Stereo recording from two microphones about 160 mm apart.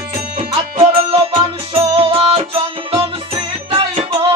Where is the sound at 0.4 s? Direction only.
40° right (ahead or behind).